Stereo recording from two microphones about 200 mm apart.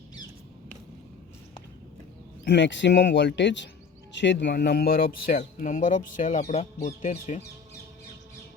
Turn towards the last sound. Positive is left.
turn(degrees=35)  # may be behind; listen again after turning